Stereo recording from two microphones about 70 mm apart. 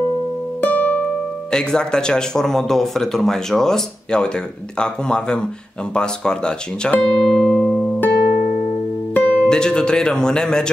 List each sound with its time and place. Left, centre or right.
0.6 s music: left
1.5 s speech: centre
7.2 s music: centre
7.8 s music: left
9.1 s speech: centre